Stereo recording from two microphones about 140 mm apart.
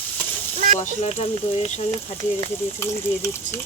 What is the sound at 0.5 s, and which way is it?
Speech, 60° right (ahead or behind).